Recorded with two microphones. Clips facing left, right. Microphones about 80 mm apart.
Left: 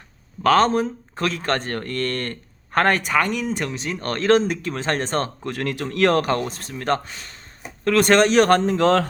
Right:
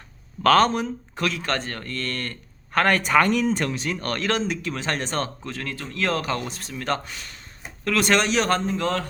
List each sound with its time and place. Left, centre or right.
0.4 s speech: left
0.7 s speech: left
3.0 s speech: centre; by 5.5 s left
5.5 s speech: left
7.9 s speech: left